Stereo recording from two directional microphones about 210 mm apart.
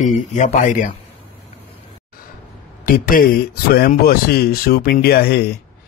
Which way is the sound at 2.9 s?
40° left (ahead or behind).